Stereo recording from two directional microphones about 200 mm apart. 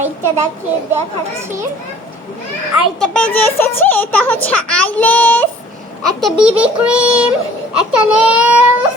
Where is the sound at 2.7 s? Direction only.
5° left (ahead or behind).